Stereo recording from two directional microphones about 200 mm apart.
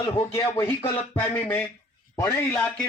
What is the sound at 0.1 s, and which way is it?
A man's voice, 15° left (ahead or behind).